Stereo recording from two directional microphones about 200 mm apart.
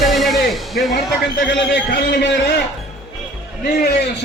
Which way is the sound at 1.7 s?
55° left (ahead or behind).